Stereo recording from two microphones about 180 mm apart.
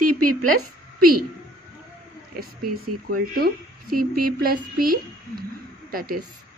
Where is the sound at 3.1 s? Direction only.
50° right (ahead or behind).